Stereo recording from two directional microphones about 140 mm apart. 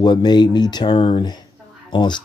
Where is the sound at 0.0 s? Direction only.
30° left (ahead or behind).